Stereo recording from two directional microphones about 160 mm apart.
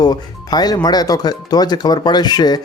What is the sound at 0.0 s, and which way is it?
Speech, 25° left (ahead or behind).